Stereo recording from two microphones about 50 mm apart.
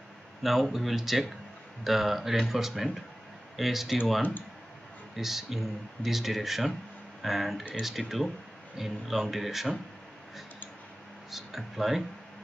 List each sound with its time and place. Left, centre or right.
0.4 s speech: centre
5.1 s speech: centre
11.2 s speech: centre